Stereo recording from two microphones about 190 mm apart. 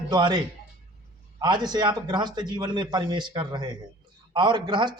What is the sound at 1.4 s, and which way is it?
Speech, 20° right (ahead or behind).